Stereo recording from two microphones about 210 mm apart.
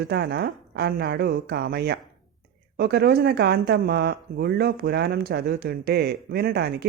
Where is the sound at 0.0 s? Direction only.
50° right (ahead or behind).